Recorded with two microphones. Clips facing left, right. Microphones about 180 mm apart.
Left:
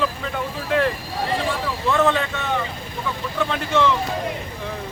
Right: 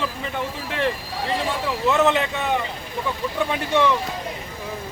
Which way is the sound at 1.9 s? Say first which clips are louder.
Even; 20° right (ahead or behind).